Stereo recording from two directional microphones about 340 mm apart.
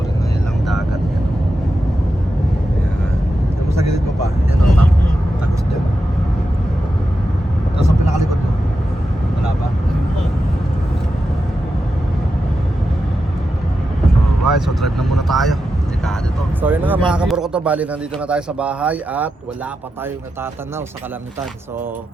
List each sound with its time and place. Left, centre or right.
3.8 s vehicle: centre
14.4 s vehicle: centre
16.6 s a sound: centre
18.3 s speech: centre